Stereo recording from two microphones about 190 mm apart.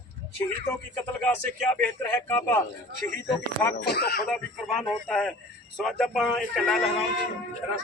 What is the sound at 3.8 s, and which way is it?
Speech, 55° left (ahead or behind).